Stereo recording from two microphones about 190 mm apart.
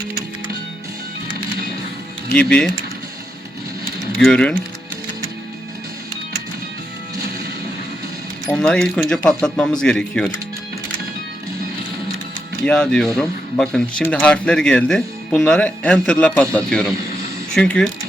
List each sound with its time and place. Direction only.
2.3 s speech: 5° left (ahead or behind)
4.2 s speech: 5° left (ahead or behind)
8.4 s speech: 5° left (ahead or behind)
12.6 s speech: 5° left (ahead or behind)